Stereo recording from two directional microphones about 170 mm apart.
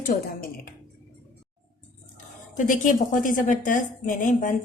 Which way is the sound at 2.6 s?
50° left (ahead or behind).